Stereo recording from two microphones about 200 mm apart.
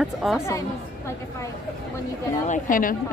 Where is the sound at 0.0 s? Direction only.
Centre (ahead or behind).